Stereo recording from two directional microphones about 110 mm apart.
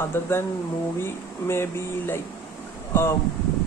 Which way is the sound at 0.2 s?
20° left (ahead or behind).